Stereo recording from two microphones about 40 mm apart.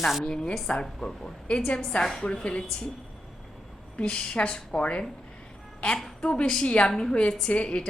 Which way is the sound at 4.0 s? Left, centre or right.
Left.